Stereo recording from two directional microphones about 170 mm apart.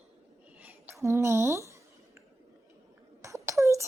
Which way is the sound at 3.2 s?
20° right (ahead or behind).